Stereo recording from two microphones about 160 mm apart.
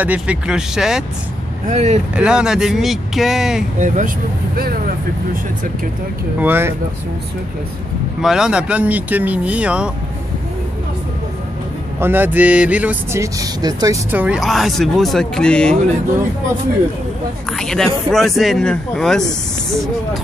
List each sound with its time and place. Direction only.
0.0 s speech: 10° right (ahead or behind)
1.7 s speech: 45° right (ahead or behind)
2.1 s speech: 5° right (ahead or behind)
3.8 s speech: 50° right (ahead or behind)
6.4 s speech: 15° right (ahead or behind)
8.2 s speech: 5° right (ahead or behind)
12.0 s speech: 10° right (ahead or behind)
13.2 s speech: 25° right (ahead or behind)
14.1 s speech: 5° right (ahead or behind)
17.5 s speech: 5° left (ahead or behind)